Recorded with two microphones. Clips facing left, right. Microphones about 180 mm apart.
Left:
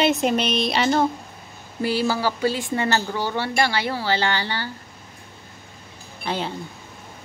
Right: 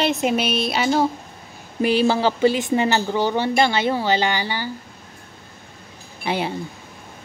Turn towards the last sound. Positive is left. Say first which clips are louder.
# right 3 dB
turn(degrees=-10)  # may be behind; listen again after turning